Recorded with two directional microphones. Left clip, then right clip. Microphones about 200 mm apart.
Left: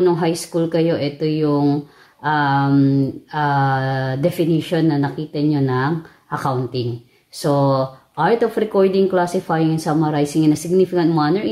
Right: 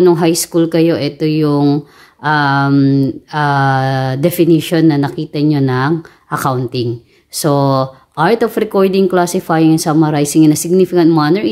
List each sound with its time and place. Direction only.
0.0 s speech: 35° right (ahead or behind)